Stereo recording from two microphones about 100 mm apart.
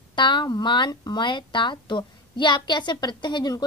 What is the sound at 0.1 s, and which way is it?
Speech, 50° left (ahead or behind).